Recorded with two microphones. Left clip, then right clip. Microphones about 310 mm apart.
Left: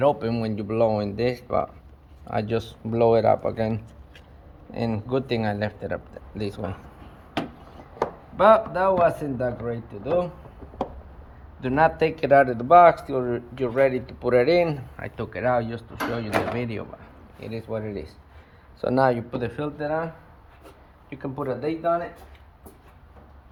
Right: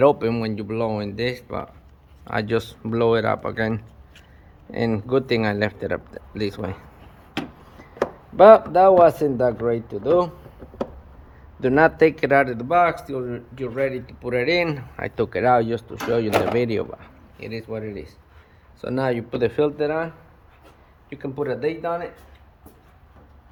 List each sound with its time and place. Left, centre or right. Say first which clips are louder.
0.0 s speech: right 4 dB; centre
8.4 s speech: right 6 dB; centre
11.6 s speech: right 4 dB; centre
14.9 s speech: right 8 dB; centre
17.4 s speech: right 1 dB; centre
21.1 s speech: right 3 dB; centre